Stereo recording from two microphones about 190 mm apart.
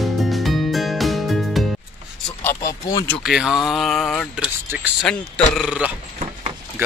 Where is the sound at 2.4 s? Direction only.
15° left (ahead or behind).